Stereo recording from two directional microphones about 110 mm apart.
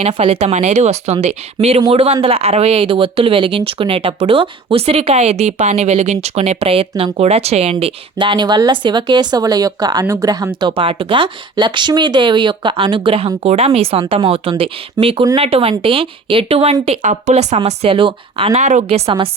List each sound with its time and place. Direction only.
0.0 s speech: 60° right (ahead or behind); by 1.4 s 85° right
1.9 s speech: 60° right (ahead or behind)
8.2 s speech: 45° right (ahead or behind)
15.0 s speech: 40° right (ahead or behind)
15.4 s speech: 60° right (ahead or behind)
16.8 s speech: 75° right (ahead or behind)
17.9 s speech: 55° right (ahead or behind)